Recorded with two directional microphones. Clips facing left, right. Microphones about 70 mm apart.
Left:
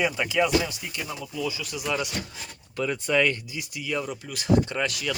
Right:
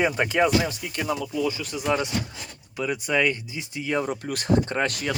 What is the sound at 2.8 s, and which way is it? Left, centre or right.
Speech, centre.